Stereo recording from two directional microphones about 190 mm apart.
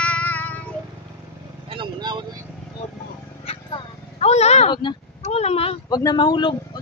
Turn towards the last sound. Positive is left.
turn(degrees=25)  # may be behind; listen again after turning